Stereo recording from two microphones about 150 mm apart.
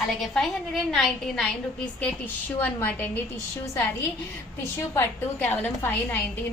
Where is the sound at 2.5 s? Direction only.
10° left (ahead or behind).